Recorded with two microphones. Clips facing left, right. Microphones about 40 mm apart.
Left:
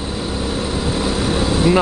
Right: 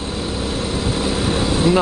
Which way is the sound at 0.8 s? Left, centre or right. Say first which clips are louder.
Left 1 dB; centre.